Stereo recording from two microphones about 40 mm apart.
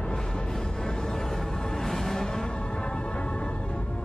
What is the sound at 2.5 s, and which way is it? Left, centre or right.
Music, left.